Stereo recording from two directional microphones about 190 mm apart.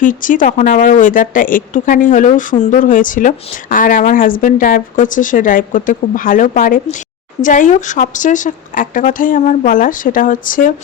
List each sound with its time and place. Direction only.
0.0 s speech: 45° left (ahead or behind)